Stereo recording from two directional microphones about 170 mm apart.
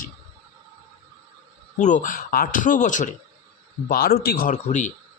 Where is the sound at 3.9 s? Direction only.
60° left (ahead or behind); by 4.9 s 45° left (ahead or behind).